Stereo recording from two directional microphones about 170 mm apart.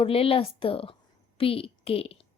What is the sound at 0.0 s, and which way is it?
A woman's voice, 35° left (ahead or behind).